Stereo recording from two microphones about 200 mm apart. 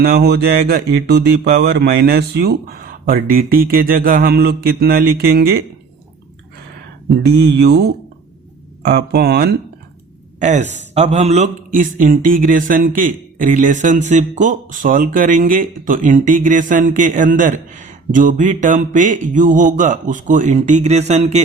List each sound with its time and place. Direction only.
0.0 s speech: 50° right (ahead or behind)
7.6 s speech: 55° right (ahead or behind)
10.4 s speech: 35° right (ahead or behind)